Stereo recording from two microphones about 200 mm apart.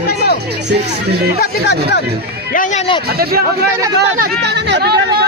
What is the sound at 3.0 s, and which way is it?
Speech, 50° right (ahead or behind).